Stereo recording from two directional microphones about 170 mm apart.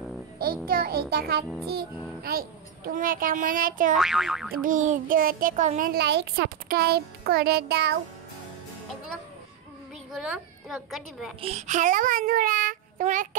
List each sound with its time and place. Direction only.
0.7 s a child's voice: 65° right (ahead or behind)
3.9 s a woman's voice: centre (ahead or behind)
4.6 s a child's voice: 50° right (ahead or behind); by 8.0 s 75° right (ahead or behind)
10.1 s a woman's voice: centre (ahead or behind)
11.4 s a child's voice: 40° right (ahead or behind)